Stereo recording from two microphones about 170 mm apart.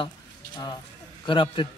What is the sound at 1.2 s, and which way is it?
Speech, 30° left (ahead or behind).